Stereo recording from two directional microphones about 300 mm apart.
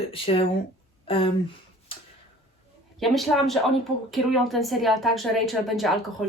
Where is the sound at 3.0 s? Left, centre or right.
Centre.